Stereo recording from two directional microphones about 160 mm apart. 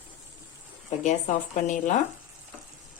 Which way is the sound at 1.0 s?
50° left (ahead or behind).